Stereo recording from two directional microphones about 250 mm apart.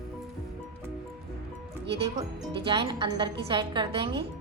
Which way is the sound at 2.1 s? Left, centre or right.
Centre.